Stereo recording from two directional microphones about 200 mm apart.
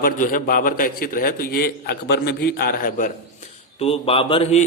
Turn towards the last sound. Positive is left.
turn(degrees=30)  # may be behind; listen again after turning